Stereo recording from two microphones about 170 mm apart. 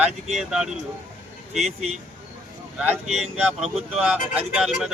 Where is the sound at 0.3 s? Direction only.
Centre (ahead or behind).